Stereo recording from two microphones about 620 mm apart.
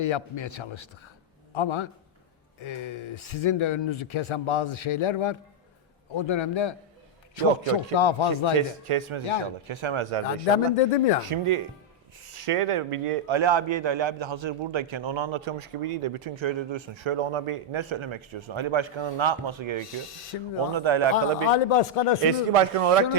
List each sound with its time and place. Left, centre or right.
0.0 s speech: left
8.5 s a man's voice: right
10.8 s speech: left
11.2 s a man's voice: right
21.4 s speech: left
22.3 s a man's voice: right